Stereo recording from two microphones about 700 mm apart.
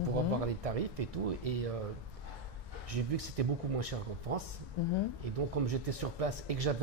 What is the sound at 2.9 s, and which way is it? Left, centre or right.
Speech, right.